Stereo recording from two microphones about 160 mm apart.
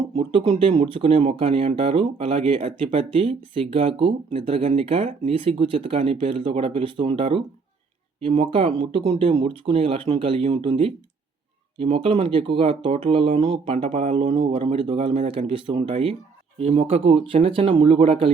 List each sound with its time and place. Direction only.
0.2 s speech: 35° right (ahead or behind)